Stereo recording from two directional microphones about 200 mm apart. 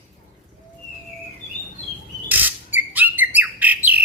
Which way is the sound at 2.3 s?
10° right (ahead or behind).